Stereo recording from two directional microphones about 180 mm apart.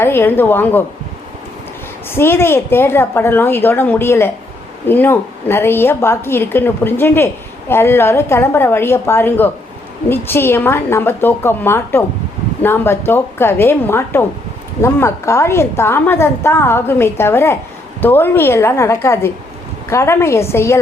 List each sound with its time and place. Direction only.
0.0 s a woman's voice: 10° left (ahead or behind)
2.0 s a woman's voice: 10° left (ahead or behind)